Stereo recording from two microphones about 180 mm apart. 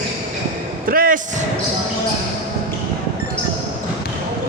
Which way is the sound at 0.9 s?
50° right (ahead or behind).